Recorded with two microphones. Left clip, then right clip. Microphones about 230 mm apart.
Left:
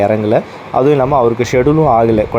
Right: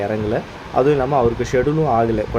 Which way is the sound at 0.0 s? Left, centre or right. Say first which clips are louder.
Left 9 dB; centre.